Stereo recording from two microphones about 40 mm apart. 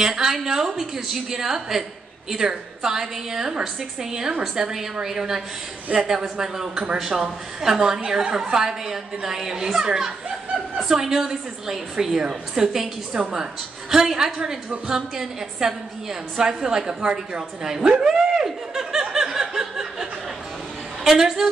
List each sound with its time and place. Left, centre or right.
0.0 s a woman's voice: centre
7.0 s a woman's voice: centre
17.8 s snicker: centre
21.0 s a woman's voice: centre